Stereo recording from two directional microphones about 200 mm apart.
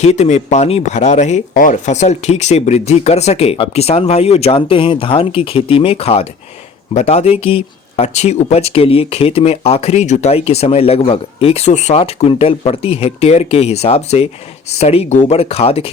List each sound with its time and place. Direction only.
0.0 s speech: 35° left (ahead or behind)